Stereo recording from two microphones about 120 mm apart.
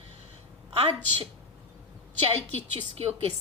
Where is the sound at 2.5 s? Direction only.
50° right (ahead or behind).